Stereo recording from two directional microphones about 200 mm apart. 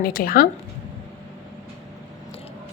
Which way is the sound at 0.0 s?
45° left (ahead or behind).